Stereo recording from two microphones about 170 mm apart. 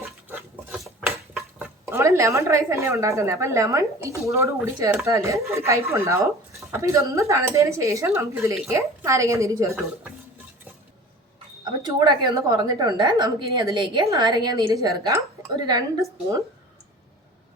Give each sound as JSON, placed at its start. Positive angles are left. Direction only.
{"t": 0.3, "sound": "dishes", "side_deg": -10}
{"t": 4.3, "sound": "a woman's voice", "side_deg": -15}
{"t": 11.9, "sound": "a woman's voice", "side_deg": -25}